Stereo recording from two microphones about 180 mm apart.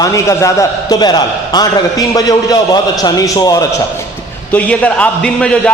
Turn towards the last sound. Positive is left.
turn(degrees=5)  # may be behind; listen again after turning